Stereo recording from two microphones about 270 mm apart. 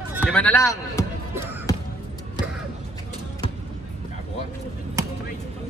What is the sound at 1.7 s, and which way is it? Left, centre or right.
Basketball bounce, centre.